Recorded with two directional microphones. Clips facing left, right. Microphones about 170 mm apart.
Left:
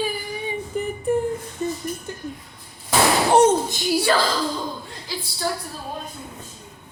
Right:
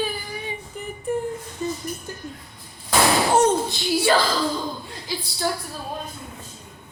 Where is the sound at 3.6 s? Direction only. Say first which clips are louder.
Left 1 dB; 45° left (ahead or behind).